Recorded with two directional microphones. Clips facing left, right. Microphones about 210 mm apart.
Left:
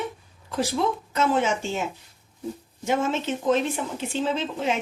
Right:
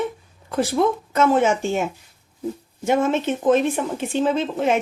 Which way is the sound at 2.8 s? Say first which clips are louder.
Right 5 dB; 55° right (ahead or behind).